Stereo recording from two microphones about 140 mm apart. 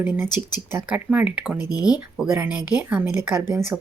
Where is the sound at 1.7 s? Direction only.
30° left (ahead or behind).